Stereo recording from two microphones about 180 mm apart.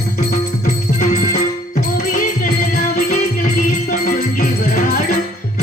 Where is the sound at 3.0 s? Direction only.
50° left (ahead or behind).